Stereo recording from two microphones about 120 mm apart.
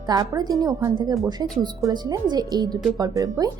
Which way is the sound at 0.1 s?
30° right (ahead or behind).